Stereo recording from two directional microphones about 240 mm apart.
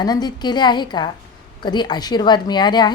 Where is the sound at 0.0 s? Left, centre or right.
Centre.